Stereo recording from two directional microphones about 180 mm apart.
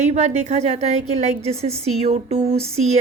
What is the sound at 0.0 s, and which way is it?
A woman's voice, 40° right (ahead or behind).